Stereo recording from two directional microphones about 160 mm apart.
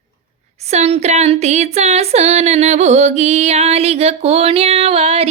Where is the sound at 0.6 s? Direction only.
40° right (ahead or behind).